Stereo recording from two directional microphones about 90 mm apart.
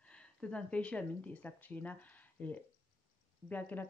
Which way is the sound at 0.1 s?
10° left (ahead or behind).